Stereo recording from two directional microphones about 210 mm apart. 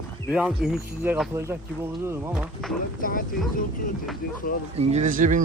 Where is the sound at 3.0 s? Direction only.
40° left (ahead or behind).